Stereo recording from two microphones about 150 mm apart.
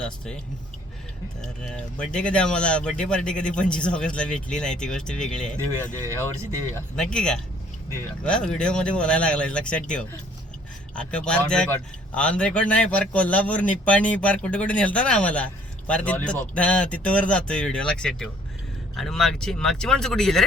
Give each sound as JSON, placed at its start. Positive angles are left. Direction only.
{"t": 1.6, "sound": "speech", "side_deg": 5}
{"t": 6.1, "sound": "speech", "side_deg": -20}
{"t": 6.9, "sound": "speech", "side_deg": 5}